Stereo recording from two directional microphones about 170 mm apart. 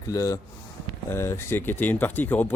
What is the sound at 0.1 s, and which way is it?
A man's voice, 20° left (ahead or behind).